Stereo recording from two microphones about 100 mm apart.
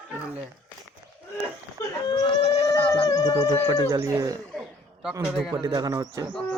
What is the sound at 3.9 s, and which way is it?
Speech, 35° right (ahead or behind).